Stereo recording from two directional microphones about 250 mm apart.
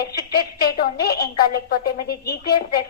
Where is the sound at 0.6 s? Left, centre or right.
Left.